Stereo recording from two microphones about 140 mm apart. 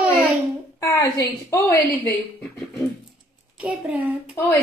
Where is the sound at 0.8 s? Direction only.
20° left (ahead or behind).